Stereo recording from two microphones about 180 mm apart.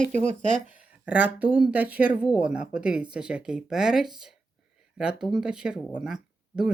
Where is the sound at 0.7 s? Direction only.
10° right (ahead or behind).